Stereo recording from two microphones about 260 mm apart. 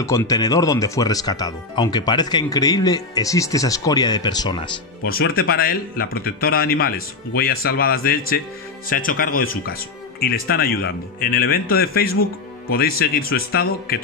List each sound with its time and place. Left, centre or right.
0.0 s speech: centre
5.0 s speech: left